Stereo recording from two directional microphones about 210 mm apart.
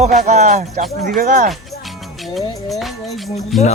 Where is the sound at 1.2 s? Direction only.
45° right (ahead or behind).